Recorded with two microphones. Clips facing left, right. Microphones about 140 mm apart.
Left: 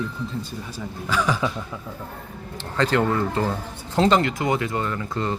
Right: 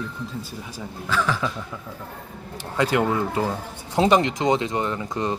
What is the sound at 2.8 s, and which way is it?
Speech, 10° right (ahead or behind).